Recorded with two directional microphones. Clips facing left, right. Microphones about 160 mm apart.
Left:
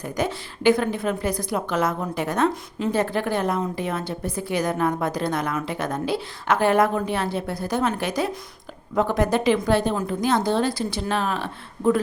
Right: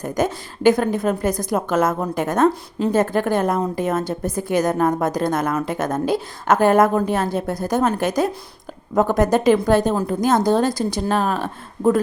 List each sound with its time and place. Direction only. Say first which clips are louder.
0.0 s a woman's voice: right 4 dB; 45° right (ahead or behind)
2.5 s a woman's voice: right 5 dB; 35° right (ahead or behind)